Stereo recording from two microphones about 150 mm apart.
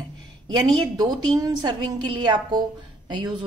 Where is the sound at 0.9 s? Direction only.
25° right (ahead or behind).